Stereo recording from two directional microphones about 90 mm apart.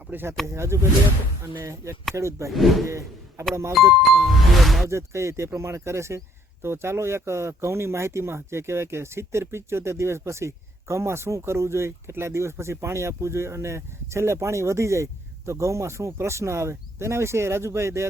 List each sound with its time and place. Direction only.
0.1 s speech: 25° right (ahead or behind)
2.5 s music: centre (ahead or behind)
2.8 s speech: 35° right (ahead or behind)
4.0 s music: centre (ahead or behind)
4.9 s speech: 30° right (ahead or behind)